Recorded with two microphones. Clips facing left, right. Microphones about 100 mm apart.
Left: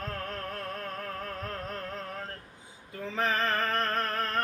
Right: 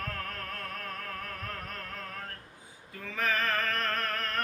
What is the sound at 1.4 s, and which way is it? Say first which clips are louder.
Music: left 4 dB; 25° left (ahead or behind).